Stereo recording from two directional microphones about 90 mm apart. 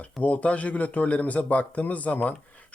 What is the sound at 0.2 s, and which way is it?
A man's voice, 15° left (ahead or behind).